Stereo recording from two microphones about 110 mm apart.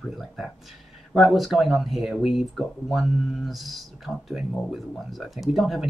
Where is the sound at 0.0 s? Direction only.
Centre (ahead or behind).